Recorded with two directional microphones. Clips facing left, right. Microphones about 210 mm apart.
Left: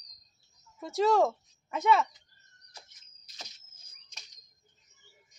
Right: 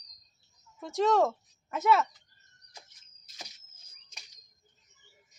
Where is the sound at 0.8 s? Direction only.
Centre (ahead or behind).